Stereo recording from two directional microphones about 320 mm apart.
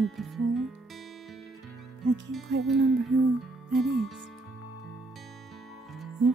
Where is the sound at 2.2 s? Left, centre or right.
Centre.